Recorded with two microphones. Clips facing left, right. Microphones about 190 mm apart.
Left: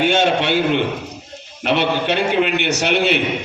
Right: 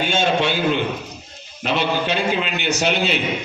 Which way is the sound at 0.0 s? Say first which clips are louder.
Left 3 dB; 70° left (ahead or behind).